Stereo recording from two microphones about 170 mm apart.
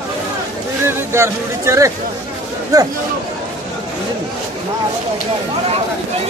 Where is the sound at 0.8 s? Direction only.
15° right (ahead or behind).